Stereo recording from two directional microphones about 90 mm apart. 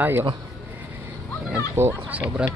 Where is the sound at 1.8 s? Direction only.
30° right (ahead or behind).